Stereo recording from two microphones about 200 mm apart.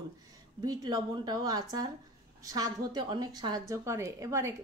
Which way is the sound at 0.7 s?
20° right (ahead or behind).